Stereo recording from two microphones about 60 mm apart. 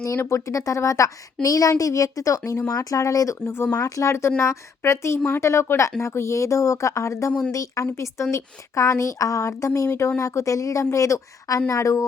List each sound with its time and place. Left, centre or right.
0.3 s a woman's voice: left
3.4 s speech: left
3.8 s a woman's voice: left
7.9 s a woman's voice: left